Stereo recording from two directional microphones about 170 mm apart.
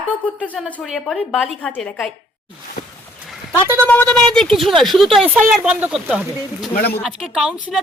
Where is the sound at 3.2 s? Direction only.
Centre (ahead or behind).